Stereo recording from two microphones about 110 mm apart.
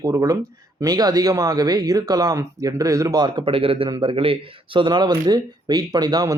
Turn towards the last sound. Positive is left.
turn(degrees=-40)  # may be behind; listen again after turning